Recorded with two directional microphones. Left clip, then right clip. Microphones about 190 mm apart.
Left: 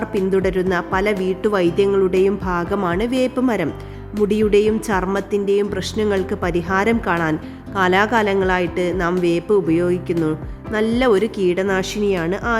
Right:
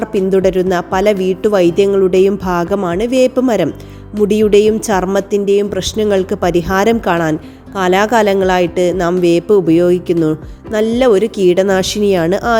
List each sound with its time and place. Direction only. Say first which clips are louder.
0.0 s a woman's voice: right 6 dB; 20° right (ahead or behind)